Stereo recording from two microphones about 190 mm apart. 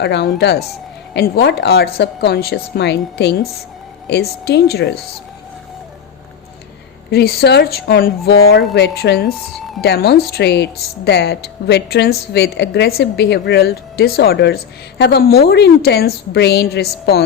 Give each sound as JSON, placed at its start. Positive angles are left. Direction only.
{"t": 0.0, "sound": "a woman's voice", "side_deg": 60}
{"t": 7.1, "sound": "a woman's voice", "side_deg": 60}